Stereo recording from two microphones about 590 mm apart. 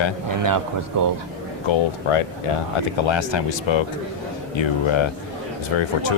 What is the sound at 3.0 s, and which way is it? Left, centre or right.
Speech, left.